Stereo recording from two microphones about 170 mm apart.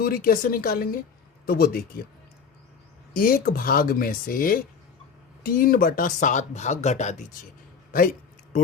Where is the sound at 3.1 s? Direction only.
60° left (ahead or behind); by 7.2 s 45° left (ahead or behind).